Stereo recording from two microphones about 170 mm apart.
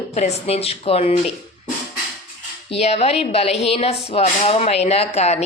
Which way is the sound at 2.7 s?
35° left (ahead or behind).